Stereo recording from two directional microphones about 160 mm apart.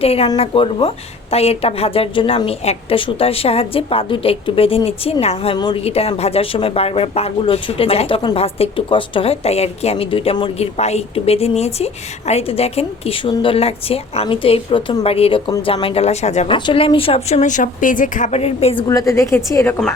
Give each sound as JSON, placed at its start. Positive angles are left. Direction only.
{"t": 0.0, "sound": "a woman's voice", "side_deg": 40}
{"t": 15.4, "sound": "a woman's voice", "side_deg": 25}
{"t": 15.7, "sound": "a woman's voice", "side_deg": 35}
{"t": 16.6, "sound": "a woman's voice", "side_deg": 30}
{"t": 18.9, "sound": "a woman's voice", "side_deg": 20}